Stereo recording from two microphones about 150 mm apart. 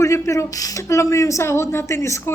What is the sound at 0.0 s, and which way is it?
A woman's voice, 20° left (ahead or behind).